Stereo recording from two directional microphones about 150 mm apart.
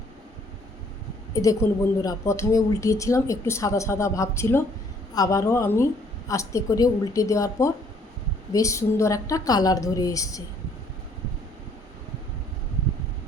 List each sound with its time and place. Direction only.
1.3 s a woman's voice: 25° left (ahead or behind)